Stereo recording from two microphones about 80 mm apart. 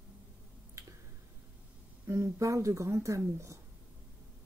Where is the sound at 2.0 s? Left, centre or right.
Right.